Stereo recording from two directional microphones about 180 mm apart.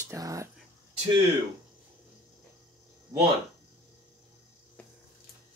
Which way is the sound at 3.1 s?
20° right (ahead or behind).